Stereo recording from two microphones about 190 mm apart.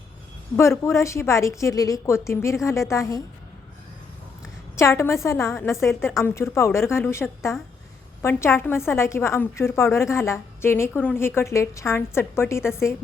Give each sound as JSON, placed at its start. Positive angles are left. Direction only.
{"t": 0.8, "sound": "a woman's voice", "side_deg": 15}
{"t": 4.8, "sound": "a woman's voice", "side_deg": 15}